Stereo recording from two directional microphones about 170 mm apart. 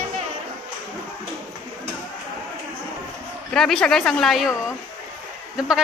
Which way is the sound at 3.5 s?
5° left (ahead or behind).